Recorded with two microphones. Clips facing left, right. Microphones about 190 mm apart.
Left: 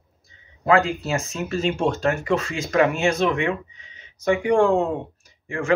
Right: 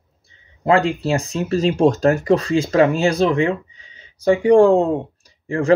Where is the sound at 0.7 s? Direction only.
30° right (ahead or behind).